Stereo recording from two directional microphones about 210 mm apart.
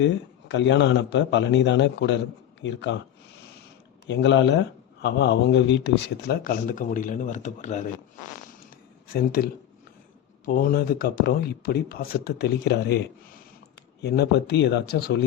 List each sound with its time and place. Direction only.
0.0 s a man's voice: 60° left (ahead or behind)
4.0 s a man's voice: 60° left (ahead or behind); by 7.9 s 35° left (ahead or behind)
9.1 s speech: 45° left (ahead or behind)